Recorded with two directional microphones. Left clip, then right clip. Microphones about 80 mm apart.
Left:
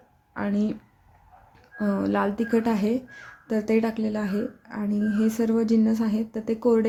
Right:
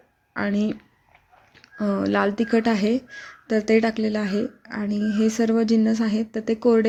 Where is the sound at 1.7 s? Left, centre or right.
Right.